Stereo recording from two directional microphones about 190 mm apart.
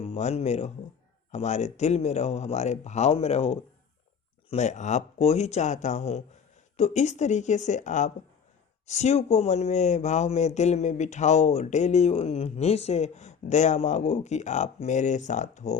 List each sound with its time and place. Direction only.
0.0 s speech: 35° left (ahead or behind)